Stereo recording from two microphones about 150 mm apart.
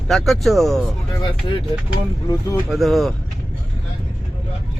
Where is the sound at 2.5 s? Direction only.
Centre (ahead or behind).